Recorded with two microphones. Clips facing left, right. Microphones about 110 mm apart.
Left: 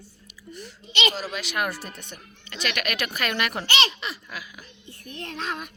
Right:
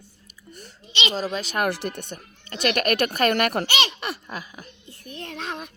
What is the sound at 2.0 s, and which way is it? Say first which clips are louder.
A child's voice: right 5 dB; 45° right (ahead or behind).